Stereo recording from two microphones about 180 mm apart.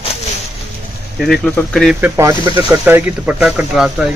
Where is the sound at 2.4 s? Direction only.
25° right (ahead or behind).